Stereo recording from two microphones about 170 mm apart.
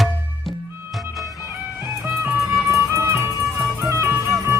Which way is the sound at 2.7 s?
15° right (ahead or behind).